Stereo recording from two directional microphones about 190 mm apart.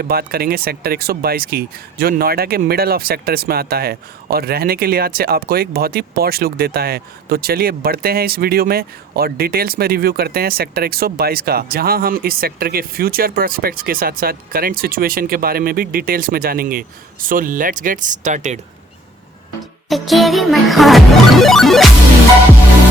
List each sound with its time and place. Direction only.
0.0 s speech: 55° right (ahead or behind); by 18.6 s 40° right (ahead or behind)
19.9 s music: centre (ahead or behind)